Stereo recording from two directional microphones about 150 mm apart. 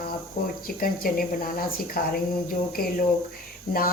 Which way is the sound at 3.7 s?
80° left.